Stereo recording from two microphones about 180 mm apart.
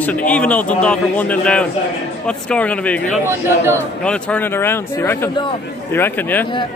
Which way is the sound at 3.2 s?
15° right (ahead or behind).